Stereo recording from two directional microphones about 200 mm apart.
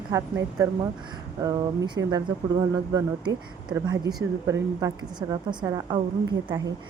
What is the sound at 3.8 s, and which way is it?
A woman's voice, 20° right (ahead or behind).